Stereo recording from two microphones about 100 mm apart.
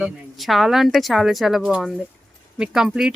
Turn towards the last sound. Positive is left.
turn(degrees=-5)  # may be behind; listen again after turning